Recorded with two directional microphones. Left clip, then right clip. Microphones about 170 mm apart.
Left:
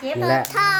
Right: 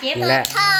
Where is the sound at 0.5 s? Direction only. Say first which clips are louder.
Right 1 dB; 50° left (ahead or behind).